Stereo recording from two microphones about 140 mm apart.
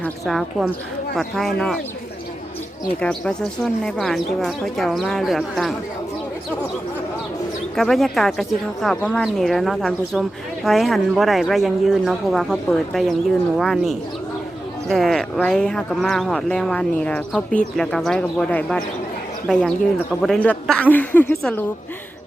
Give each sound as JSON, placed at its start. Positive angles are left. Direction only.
{"t": 0.3, "sound": "speech", "side_deg": 0}
{"t": 3.0, "sound": "speech", "side_deg": 5}
{"t": 7.8, "sound": "speech", "side_deg": 0}